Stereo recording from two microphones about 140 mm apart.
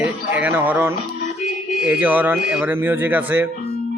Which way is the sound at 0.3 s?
10° right (ahead or behind).